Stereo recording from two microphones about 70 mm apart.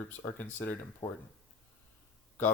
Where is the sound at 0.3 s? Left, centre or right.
Left.